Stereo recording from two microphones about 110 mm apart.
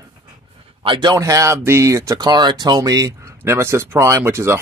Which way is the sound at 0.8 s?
45° right (ahead or behind).